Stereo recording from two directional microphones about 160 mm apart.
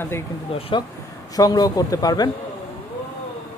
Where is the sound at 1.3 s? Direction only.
25° left (ahead or behind).